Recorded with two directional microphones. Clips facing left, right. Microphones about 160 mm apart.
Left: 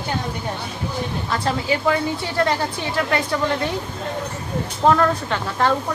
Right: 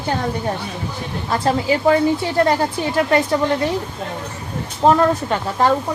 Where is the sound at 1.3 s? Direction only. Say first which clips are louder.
Right 5 dB; 30° right (ahead or behind).